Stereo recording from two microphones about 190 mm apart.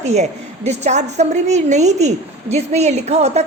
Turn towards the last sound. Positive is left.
turn(degrees=-35)  # may be behind; listen again after turning